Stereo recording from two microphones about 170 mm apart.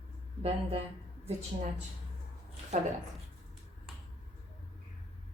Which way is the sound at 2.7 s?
40° right (ahead or behind).